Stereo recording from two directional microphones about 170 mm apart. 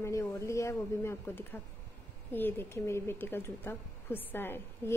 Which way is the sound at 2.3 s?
10° left (ahead or behind).